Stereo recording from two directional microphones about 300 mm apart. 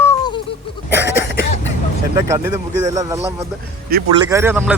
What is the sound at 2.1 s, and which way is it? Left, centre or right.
Speech, centre.